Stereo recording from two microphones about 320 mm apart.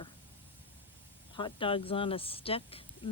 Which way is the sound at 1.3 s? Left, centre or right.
Centre.